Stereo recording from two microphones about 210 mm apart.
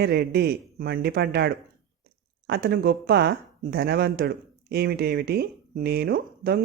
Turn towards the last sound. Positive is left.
turn(degrees=-45)  # may be behind; listen again after turning